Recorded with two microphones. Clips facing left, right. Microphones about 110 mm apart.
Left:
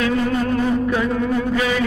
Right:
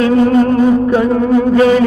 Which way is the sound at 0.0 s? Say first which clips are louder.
Right 9 dB; 40° right (ahead or behind).